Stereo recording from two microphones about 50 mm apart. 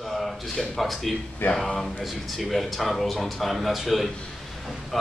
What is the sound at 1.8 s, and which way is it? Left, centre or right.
A man's voice, centre.